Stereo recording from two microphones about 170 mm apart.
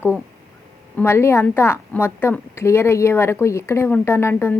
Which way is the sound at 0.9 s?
15° left (ahead or behind).